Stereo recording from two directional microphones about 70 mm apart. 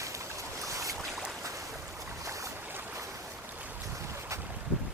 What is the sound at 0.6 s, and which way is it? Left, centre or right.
Boat, right.